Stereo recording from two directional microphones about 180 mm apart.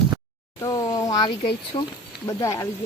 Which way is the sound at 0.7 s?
20° left (ahead or behind).